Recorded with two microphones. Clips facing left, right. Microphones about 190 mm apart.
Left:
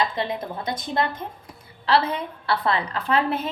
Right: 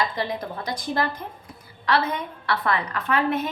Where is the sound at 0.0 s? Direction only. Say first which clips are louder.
Left 1 dB; 25° left (ahead or behind).